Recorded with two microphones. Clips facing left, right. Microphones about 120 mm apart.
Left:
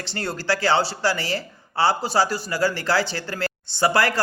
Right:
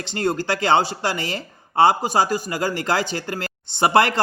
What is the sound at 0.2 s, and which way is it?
Speech, 20° right (ahead or behind).